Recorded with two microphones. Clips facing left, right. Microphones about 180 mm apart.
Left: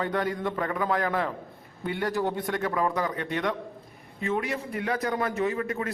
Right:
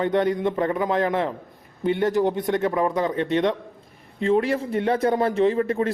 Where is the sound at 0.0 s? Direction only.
20° right (ahead or behind).